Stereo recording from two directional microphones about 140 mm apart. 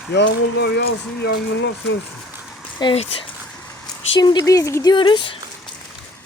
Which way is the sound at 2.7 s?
35° left (ahead or behind).